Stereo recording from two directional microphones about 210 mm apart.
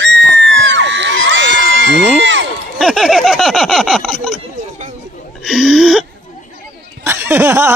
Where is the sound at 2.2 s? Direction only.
60° right (ahead or behind).